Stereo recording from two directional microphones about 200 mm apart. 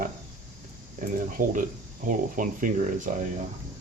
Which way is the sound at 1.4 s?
40° right (ahead or behind).